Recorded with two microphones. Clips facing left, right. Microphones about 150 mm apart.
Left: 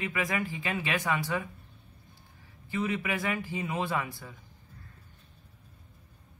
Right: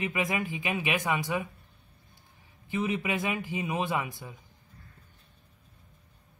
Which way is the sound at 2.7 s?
20° right (ahead or behind).